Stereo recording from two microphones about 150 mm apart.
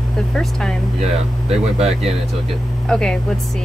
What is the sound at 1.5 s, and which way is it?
Speech, 45° right (ahead or behind).